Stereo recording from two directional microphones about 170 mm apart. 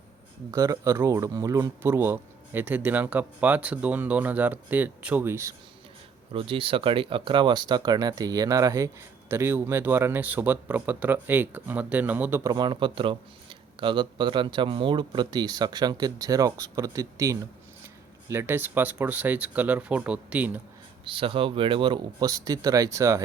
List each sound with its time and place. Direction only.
0.5 s speech: 20° right (ahead or behind)
6.3 s a man's voice: 30° right (ahead or behind); by 20.6 s 10° right (ahead or behind)
21.0 s a man's voice: 30° right (ahead or behind)